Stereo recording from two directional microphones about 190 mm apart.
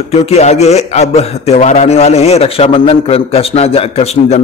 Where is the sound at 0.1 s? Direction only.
35° left (ahead or behind).